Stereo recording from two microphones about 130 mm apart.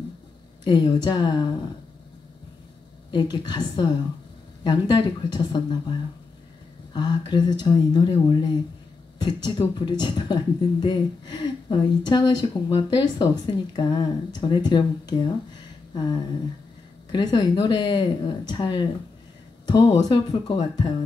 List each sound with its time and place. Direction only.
0.7 s speech: 35° left (ahead or behind)
3.1 s speech: 35° left (ahead or behind)